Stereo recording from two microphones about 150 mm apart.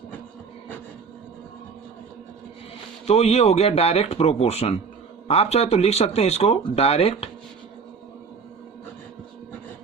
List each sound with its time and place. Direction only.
3.1 s speech: 45° left (ahead or behind)